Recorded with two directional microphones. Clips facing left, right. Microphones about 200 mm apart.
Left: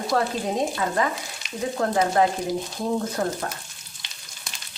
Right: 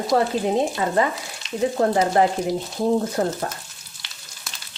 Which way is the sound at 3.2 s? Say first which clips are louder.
Right 3 dB; 30° right (ahead or behind).